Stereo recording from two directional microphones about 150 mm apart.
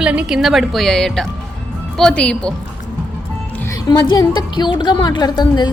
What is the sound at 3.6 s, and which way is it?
A woman's voice, 20° left (ahead or behind).